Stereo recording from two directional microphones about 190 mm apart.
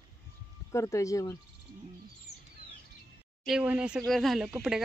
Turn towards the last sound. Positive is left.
turn(degrees=-5)  # may be behind; listen again after turning